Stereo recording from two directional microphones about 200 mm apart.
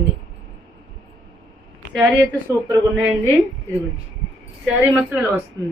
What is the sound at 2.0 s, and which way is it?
Speech, 15° right (ahead or behind).